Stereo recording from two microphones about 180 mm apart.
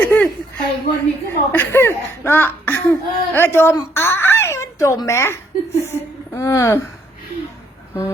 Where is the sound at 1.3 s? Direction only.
10° left (ahead or behind).